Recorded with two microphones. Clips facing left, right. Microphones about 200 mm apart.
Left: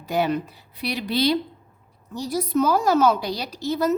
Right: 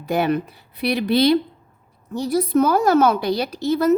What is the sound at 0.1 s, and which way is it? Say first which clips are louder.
A woman's voice: right 3 dB; 55° right (ahead or behind).